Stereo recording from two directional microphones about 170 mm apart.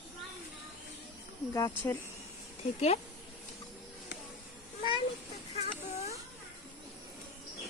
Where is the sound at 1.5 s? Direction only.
15° left (ahead or behind).